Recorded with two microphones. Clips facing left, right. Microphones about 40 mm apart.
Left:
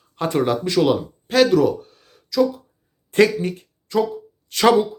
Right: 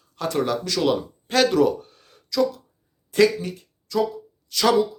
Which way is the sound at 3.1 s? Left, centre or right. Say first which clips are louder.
Left 2 dB; left.